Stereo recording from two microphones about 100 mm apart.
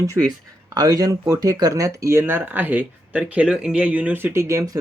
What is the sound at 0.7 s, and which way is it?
Speech, 40° right (ahead or behind).